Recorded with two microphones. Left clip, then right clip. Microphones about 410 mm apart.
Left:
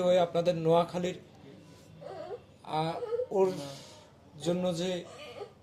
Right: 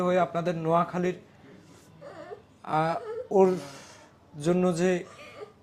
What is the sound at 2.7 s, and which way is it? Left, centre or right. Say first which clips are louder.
A woman's voice: right 5 dB; right.